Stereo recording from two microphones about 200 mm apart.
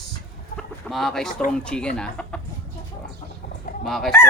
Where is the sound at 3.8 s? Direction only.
Centre (ahead or behind).